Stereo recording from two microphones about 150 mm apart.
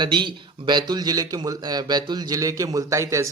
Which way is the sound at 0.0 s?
30° right (ahead or behind).